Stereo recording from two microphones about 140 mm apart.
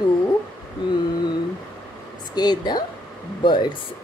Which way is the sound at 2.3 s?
30° left (ahead or behind).